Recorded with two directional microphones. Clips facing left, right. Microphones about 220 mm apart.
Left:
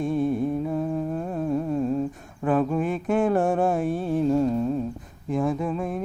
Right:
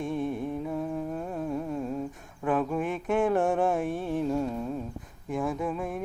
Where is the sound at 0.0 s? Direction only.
35° left (ahead or behind).